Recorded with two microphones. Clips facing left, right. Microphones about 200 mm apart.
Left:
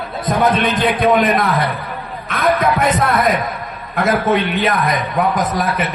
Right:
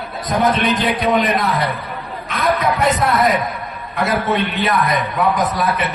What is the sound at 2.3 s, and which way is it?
A man's voice, 50° left (ahead or behind).